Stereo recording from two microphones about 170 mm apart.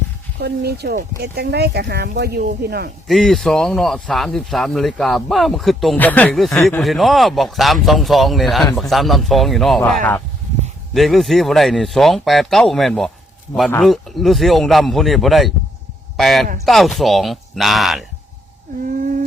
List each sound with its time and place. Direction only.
0.3 s speech: 70° right (ahead or behind)
3.1 s speech: centre (ahead or behind)